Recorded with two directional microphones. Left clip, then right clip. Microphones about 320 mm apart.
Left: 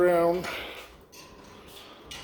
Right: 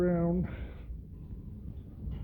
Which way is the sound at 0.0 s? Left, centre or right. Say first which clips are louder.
Left 9 dB; centre.